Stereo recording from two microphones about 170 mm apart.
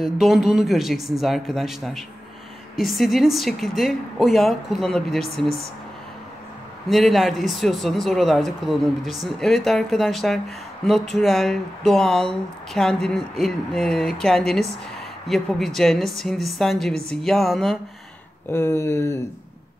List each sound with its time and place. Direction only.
0.0 s speech: centre (ahead or behind)
6.9 s speech: centre (ahead or behind)
18.5 s speech: 15° left (ahead or behind)